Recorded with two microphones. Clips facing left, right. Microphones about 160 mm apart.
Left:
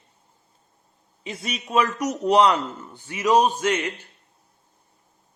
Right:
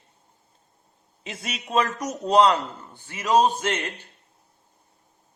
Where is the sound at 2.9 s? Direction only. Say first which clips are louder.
Left 1 dB; 15° left (ahead or behind).